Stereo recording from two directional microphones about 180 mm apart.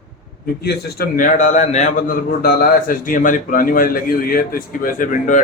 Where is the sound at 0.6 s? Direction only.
60° left (ahead or behind).